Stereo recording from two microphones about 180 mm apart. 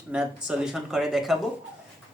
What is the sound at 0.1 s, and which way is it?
Speech, 5° right (ahead or behind).